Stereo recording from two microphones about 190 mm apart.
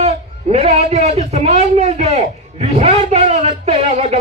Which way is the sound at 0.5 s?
30° right (ahead or behind).